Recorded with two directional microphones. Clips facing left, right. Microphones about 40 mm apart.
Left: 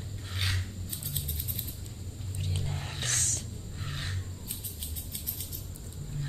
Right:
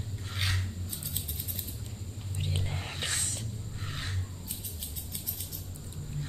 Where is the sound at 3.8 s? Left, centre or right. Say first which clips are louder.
Left 1 dB; centre.